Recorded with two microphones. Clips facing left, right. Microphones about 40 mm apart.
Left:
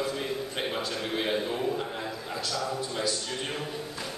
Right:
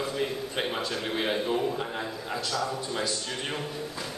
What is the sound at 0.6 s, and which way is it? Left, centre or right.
A man's voice, centre.